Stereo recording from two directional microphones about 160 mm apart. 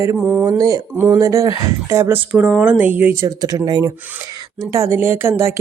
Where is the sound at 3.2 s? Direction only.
25° right (ahead or behind).